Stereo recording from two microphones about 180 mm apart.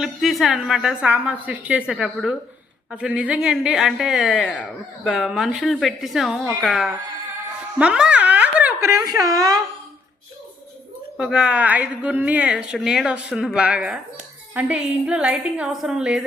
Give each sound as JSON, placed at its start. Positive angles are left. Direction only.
{"t": 0.0, "sound": "a woman's voice", "side_deg": 0}
{"t": 11.2, "sound": "a woman's voice", "side_deg": -5}